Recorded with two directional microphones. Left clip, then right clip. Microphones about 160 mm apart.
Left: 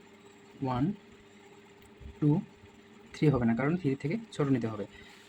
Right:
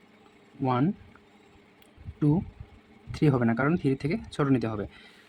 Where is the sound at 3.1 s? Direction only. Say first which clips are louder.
Right 3 dB; 40° right (ahead or behind).